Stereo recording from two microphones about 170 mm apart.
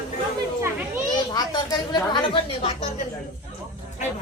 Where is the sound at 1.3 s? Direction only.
25° left (ahead or behind).